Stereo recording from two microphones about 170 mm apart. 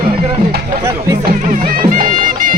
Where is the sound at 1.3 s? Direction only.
55° right (ahead or behind).